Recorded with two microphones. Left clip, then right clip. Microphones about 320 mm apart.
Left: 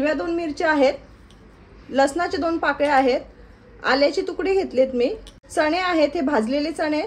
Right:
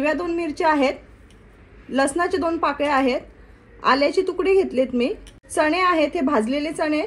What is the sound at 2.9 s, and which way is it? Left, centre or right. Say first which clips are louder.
A woman's voice: left 2 dB; right.